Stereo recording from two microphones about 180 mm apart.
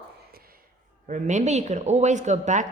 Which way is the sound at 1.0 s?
40° right (ahead or behind).